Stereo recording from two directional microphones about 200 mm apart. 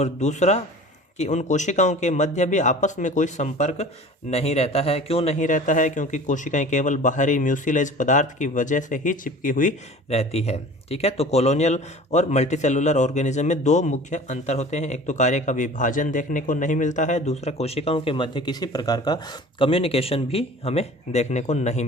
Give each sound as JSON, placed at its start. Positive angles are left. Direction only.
{"t": 0.0, "sound": "speech", "side_deg": 35}